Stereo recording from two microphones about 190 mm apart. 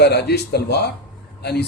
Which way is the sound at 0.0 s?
60° left (ahead or behind).